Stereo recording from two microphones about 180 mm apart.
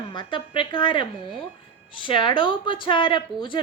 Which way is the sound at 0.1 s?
25° left (ahead or behind).